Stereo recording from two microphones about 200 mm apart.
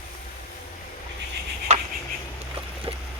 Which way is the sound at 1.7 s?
35° right (ahead or behind).